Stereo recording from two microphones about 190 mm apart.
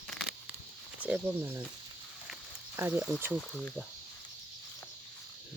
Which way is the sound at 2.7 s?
10° right (ahead or behind).